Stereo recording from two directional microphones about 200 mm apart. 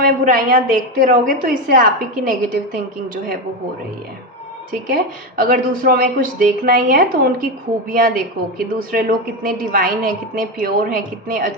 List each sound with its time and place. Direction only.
0.0 s a woman's voice: 45° right (ahead or behind)
5.4 s a woman's voice: 45° right (ahead or behind)